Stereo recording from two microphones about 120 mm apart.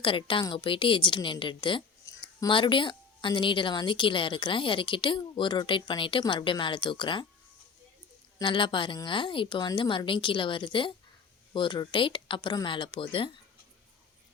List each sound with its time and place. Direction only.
0.0 s a woman's voice: 45° left (ahead or behind)
2.0 s a sound: 30° left (ahead or behind)
2.5 s a woman's voice: 45° left (ahead or behind)
8.4 s a woman's voice: 45° left (ahead or behind)